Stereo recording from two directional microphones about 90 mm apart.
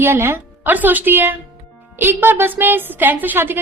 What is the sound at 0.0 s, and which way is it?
A woman's voice, 30° right (ahead or behind).